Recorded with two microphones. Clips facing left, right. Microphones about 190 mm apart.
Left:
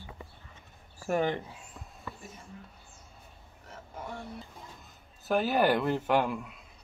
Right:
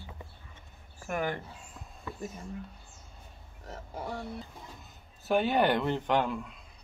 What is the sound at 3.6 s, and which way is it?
Speech, 35° right (ahead or behind).